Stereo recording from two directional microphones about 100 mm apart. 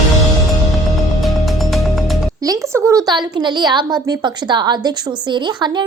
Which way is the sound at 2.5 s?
30° right (ahead or behind).